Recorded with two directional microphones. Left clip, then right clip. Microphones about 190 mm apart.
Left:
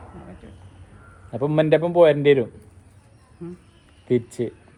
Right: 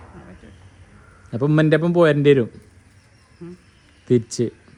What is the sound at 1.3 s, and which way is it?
Speech, 60° right (ahead or behind).